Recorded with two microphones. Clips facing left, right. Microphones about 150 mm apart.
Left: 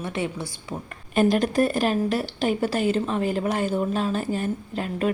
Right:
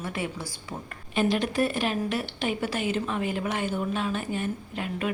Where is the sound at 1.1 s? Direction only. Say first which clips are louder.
Left 5 dB; 45° left (ahead or behind).